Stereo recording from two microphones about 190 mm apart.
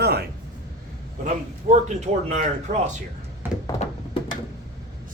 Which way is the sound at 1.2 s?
40° right (ahead or behind).